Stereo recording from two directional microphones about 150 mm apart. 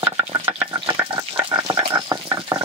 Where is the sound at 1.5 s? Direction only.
20° right (ahead or behind).